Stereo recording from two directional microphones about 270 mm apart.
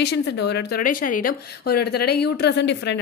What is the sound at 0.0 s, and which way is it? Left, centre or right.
A woman's voice, left.